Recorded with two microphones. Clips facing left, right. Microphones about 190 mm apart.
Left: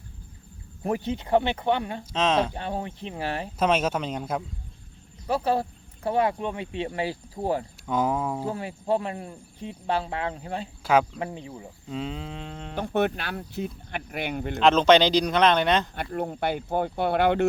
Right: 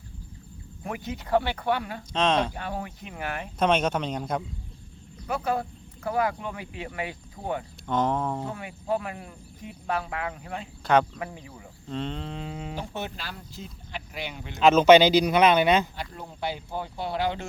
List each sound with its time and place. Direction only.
0.9 s speech: 30° left (ahead or behind)
2.1 s a sound: 5° left (ahead or behind)
2.5 s speech: 25° left (ahead or behind)
3.6 s a sound: 5° left (ahead or behind)
5.2 s speech: 30° left (ahead or behind)
7.9 s speech: 5° left (ahead or behind)
8.4 s speech: 30° left (ahead or behind)
11.9 s a sound: 5° left (ahead or behind)
12.7 s speech: 60° left (ahead or behind)
14.5 s speech: 5° right (ahead or behind)
16.0 s speech: 55° left (ahead or behind)